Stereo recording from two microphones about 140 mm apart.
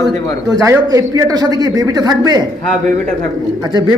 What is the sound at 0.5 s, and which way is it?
A man's voice, 25° right (ahead or behind).